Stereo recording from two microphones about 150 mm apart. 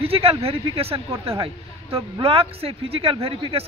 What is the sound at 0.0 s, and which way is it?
Speech, 40° right (ahead or behind).